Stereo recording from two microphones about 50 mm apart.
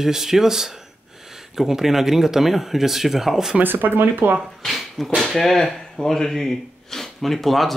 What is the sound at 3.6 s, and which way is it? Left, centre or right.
Speech, right.